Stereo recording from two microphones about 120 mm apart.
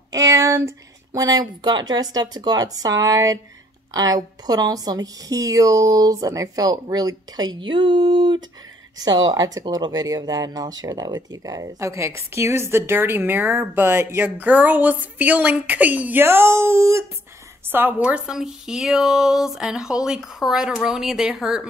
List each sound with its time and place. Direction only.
0.1 s a woman's voice: 25° right (ahead or behind); by 21.6 s 5° right (ahead or behind)